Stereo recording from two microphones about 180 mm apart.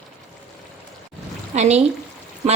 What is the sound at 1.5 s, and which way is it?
Speech, 40° right (ahead or behind).